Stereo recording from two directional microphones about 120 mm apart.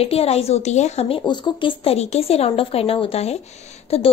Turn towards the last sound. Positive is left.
turn(degrees=55)  # may be behind; listen again after turning